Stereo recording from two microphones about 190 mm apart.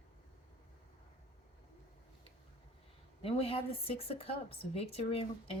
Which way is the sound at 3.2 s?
30° left (ahead or behind).